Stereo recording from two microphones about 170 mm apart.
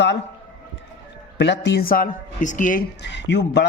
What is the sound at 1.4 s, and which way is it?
Speech, 90° left.